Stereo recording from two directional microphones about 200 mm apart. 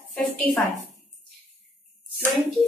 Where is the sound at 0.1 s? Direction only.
5° left (ahead or behind).